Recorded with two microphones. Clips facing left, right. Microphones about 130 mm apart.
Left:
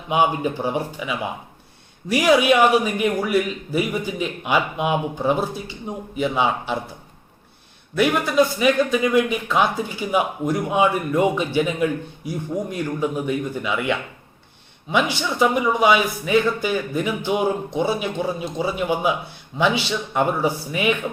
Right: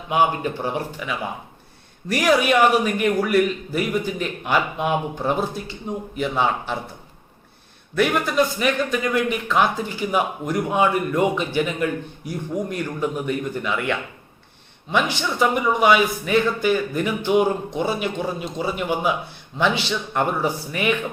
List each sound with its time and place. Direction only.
0.1 s a man's voice: 10° left (ahead or behind)
2.1 s a man's voice: 10° left (ahead or behind)
7.9 s a man's voice: 5° left (ahead or behind)